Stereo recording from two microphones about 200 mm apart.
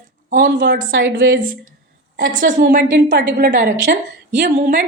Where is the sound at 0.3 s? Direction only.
55° right (ahead or behind).